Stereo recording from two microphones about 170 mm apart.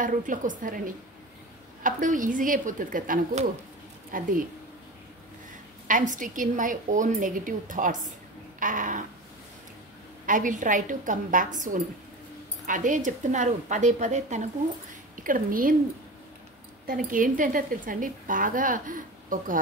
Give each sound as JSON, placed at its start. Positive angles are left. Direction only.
{"t": 0.0, "sound": "speech", "side_deg": -50}
{"t": 5.9, "sound": "speech", "side_deg": -50}
{"t": 8.5, "sound": "a sound", "side_deg": -50}
{"t": 10.2, "sound": "speech", "side_deg": -50}
{"t": 16.8, "sound": "speech", "side_deg": -55}